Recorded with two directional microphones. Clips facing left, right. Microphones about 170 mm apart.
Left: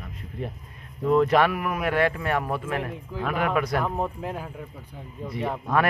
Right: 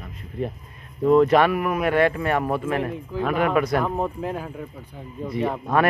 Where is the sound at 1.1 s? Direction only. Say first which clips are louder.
Right 4 dB; 20° right (ahead or behind).